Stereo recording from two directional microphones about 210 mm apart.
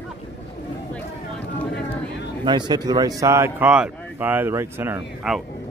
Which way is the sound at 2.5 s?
20° right (ahead or behind).